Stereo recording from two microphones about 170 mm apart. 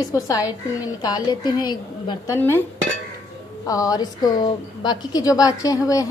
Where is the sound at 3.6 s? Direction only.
20° left (ahead or behind).